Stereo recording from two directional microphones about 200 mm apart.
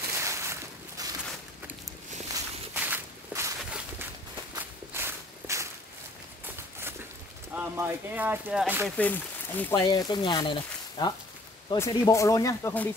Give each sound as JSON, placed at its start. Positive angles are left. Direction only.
{"t": 0.2, "sound": "boat", "side_deg": -15}
{"t": 2.3, "sound": "walk", "side_deg": -10}
{"t": 7.5, "sound": "speech", "side_deg": -10}
{"t": 8.9, "sound": "speech", "side_deg": 10}